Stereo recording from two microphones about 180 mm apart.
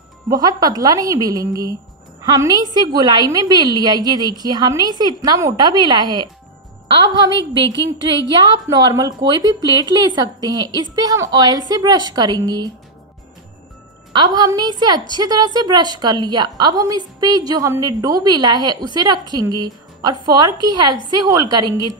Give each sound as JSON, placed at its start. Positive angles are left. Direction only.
{"t": 0.3, "sound": "a woman's voice", "side_deg": -20}
{"t": 7.3, "sound": "a woman's voice", "side_deg": -85}
{"t": 8.6, "sound": "a woman's voice", "side_deg": -20}
{"t": 14.1, "sound": "a woman's voice", "side_deg": -20}